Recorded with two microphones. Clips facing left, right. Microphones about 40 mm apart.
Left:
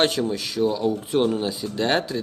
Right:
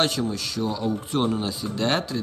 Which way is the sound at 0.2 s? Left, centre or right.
Centre.